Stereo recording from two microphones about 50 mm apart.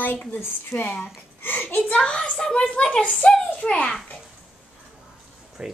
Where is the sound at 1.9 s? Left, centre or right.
Left.